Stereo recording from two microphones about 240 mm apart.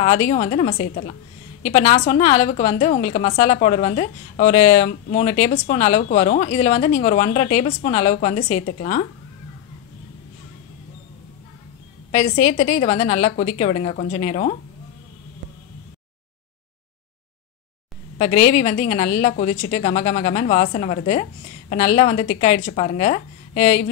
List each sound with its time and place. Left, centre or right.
0.0 s a woman's voice: left
12.1 s a woman's voice: left
18.1 s a woman's voice: left